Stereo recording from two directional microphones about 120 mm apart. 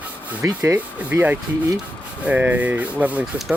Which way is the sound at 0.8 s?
15° right (ahead or behind).